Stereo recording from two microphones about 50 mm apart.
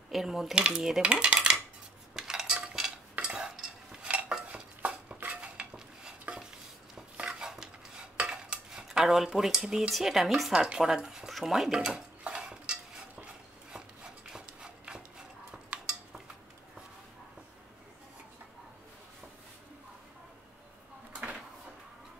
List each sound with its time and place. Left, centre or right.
0.1 s speech: centre
1.0 s cutlery: right
3.2 s stir: centre
7.2 s dishes: centre
8.3 s cutlery: centre
10.5 s speech: centre
11.2 s dishes: centre
13.7 s a sound: centre
15.7 s cutlery: right
21.1 s drawer open or close: right